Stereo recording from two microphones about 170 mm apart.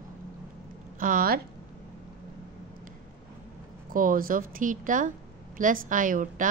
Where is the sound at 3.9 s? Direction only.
55° right (ahead or behind).